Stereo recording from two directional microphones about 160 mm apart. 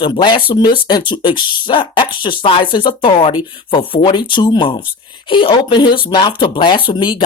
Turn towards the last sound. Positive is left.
turn(degrees=30)  # may be behind; listen again after turning